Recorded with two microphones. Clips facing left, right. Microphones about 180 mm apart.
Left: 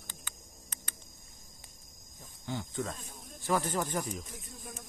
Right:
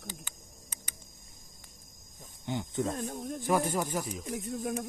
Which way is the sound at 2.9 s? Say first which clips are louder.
Right 14 dB; 65° right (ahead or behind).